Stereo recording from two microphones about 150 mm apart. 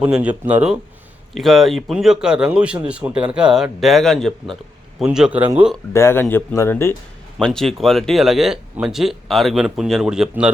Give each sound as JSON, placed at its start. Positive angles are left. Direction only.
{"t": 0.0, "sound": "speech", "side_deg": -10}
{"t": 5.9, "sound": "speech", "side_deg": 15}
{"t": 7.3, "sound": "speech", "side_deg": 5}